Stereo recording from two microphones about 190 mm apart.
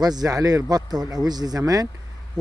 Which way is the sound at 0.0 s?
20° right (ahead or behind).